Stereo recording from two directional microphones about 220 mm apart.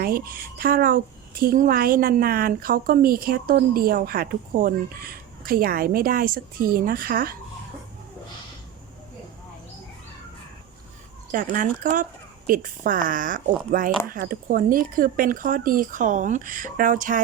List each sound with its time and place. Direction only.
0.0 s a woman's voice: 40° right (ahead or behind)
11.3 s a woman's voice: 35° right (ahead or behind)